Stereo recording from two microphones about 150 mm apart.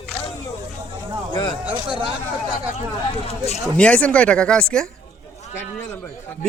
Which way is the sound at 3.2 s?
45° left (ahead or behind).